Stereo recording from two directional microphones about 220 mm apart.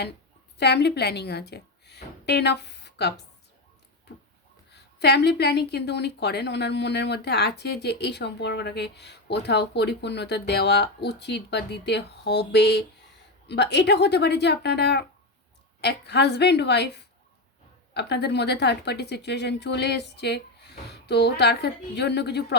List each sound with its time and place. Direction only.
0.6 s a woman's voice: 50° left (ahead or behind)
4.1 s a sound: 45° left (ahead or behind)
4.7 s a woman's voice: 50° left (ahead or behind)